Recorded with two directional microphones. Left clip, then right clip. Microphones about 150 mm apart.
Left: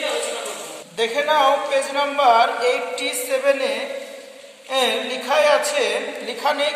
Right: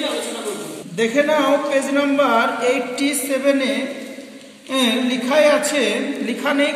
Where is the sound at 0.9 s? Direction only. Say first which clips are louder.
Right 2 dB; 35° left (ahead or behind).